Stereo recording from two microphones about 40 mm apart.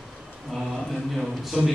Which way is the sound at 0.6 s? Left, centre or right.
Centre.